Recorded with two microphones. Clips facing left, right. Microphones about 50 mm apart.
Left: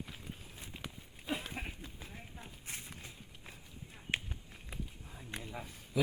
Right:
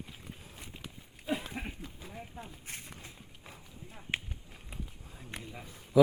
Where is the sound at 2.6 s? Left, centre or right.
Right.